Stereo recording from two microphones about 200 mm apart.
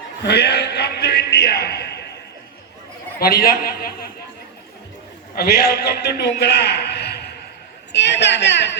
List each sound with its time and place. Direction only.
0.2 s a sound: 55° left (ahead or behind)
3.2 s a man's voice: 45° left (ahead or behind)
5.3 s a man's voice: 50° left (ahead or behind)